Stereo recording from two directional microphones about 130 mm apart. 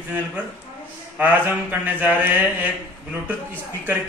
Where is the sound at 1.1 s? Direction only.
15° right (ahead or behind).